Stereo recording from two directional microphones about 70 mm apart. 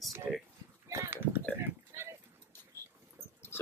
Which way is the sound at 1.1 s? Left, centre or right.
Right.